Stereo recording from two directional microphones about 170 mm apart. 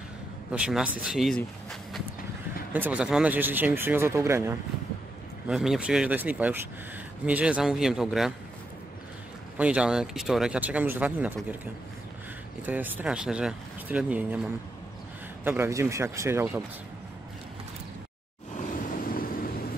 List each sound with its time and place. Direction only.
0.5 s speech: 5° right (ahead or behind)
2.7 s speech: 10° right (ahead or behind)
5.5 s speech: 5° right (ahead or behind)
9.6 s speech: 5° right (ahead or behind)
12.6 s speech: 10° right (ahead or behind)
18.6 s vehicle: 55° left (ahead or behind)